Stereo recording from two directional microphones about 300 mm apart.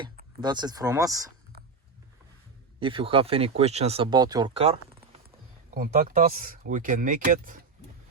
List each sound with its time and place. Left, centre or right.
0.0 s speech: centre
2.8 s speech: centre